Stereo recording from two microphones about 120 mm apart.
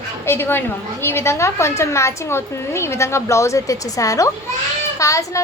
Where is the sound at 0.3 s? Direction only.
20° left (ahead or behind).